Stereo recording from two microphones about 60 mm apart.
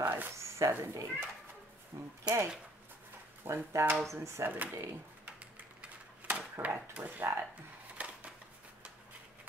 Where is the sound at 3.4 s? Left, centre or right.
Right.